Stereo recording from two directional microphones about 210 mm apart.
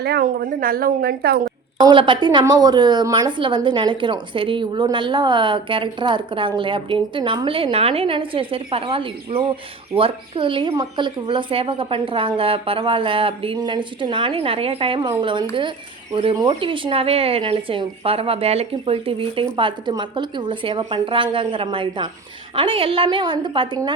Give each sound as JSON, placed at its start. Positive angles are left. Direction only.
{"t": 0.0, "sound": "a woman's voice", "side_deg": -50}
{"t": 1.8, "sound": "a woman's voice", "side_deg": -25}